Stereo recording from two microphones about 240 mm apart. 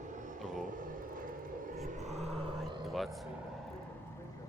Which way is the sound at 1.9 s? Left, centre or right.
Right.